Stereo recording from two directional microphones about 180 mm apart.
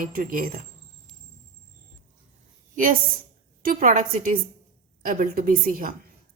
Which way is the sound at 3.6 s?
50° right (ahead or behind).